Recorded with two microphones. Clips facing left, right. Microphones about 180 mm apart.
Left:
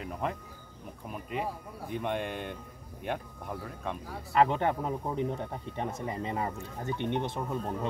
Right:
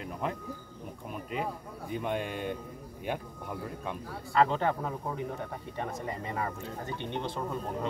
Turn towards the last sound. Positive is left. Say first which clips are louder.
# left 1 dB
turn(degrees=20)  # may be behind; listen again after turning